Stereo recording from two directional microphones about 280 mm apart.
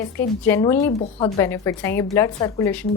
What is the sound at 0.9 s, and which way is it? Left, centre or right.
Speech, left.